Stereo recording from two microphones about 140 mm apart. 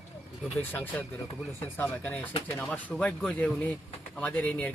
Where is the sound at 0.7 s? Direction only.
10° left (ahead or behind).